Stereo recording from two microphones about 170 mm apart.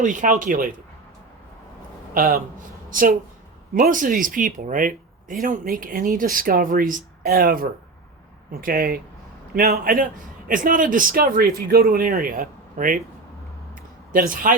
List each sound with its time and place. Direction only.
0.0 s speech: 50° right (ahead or behind)
2.1 s a man's voice: 65° right (ahead or behind)
14.1 s a man's voice: 55° right (ahead or behind)